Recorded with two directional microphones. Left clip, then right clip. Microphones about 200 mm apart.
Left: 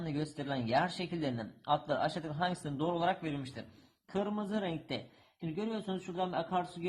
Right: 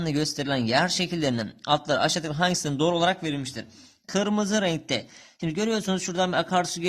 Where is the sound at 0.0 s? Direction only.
40° right (ahead or behind).